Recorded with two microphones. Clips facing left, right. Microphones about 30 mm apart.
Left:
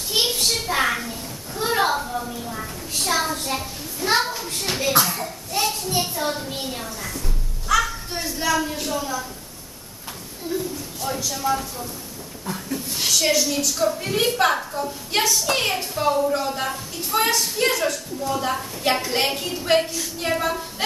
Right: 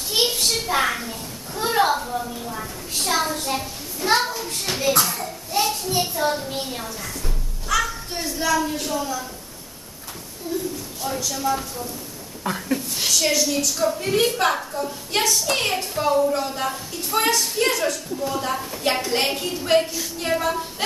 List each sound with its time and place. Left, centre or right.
0.1 s a sound: centre
7.6 s a woman's voice: centre
10.4 s speech: left
11.0 s a woman's voice: centre
12.5 s speech: right
12.9 s a woman's voice: centre